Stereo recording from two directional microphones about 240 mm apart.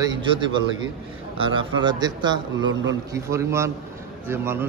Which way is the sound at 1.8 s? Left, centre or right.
Centre.